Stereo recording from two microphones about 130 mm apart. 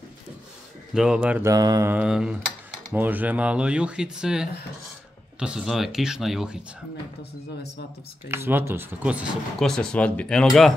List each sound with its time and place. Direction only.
0.9 s speech: 5° right (ahead or behind)
1.4 s mantra: 30° right (ahead or behind)
1.9 s speech: 10° right (ahead or behind)
8.3 s speech: 15° right (ahead or behind)
9.6 s speech: 5° left (ahead or behind)